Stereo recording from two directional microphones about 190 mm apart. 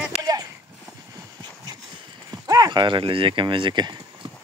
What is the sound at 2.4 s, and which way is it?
Speech, 20° right (ahead or behind).